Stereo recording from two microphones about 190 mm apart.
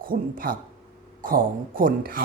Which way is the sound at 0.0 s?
50° right (ahead or behind).